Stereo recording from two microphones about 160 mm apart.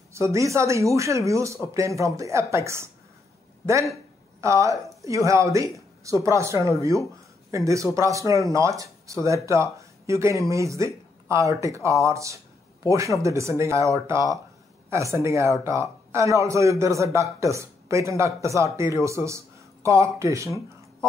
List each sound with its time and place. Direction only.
0.1 s a man's voice: 20° right (ahead or behind)
4.4 s a man's voice: 20° right (ahead or behind)